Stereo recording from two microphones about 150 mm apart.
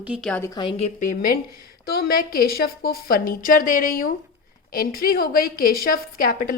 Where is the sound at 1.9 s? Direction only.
85° left; by 3.9 s 65° left (ahead or behind).